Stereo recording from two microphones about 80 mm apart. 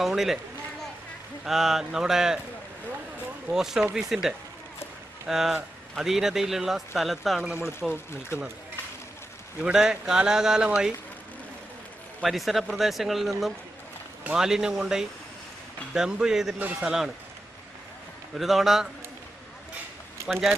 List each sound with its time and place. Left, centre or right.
0.0 s speech: centre
1.5 s speech: centre
3.5 s a man's voice: centre
7.6 s speech: left
9.6 s a man's voice: centre
12.2 s a man's voice: centre
18.3 s speech: centre
20.3 s speech: centre